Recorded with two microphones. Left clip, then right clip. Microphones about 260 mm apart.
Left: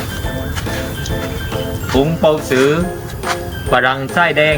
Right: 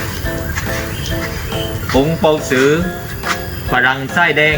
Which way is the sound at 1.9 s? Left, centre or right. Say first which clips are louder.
Even; centre.